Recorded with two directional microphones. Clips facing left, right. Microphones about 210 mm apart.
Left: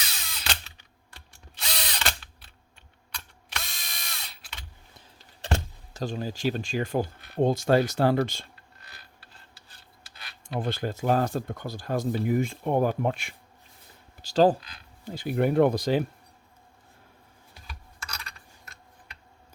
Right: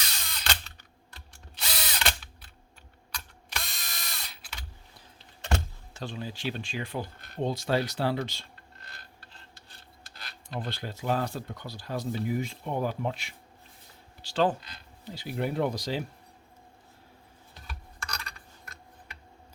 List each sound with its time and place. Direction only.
0.0 s tools: 5° left (ahead or behind)
1.5 s ratchet: centre (ahead or behind)
3.5 s drill: centre (ahead or behind)
5.4 s a sound: 35° left (ahead or behind)
7.4 s speech: 45° left (ahead or behind)
10.0 s a sound: centre (ahead or behind)
10.6 s speech: 45° left (ahead or behind)
14.2 s speech: 40° left (ahead or behind)
15.0 s speech: 50° left (ahead or behind)
17.7 s computer keyboard: centre (ahead or behind)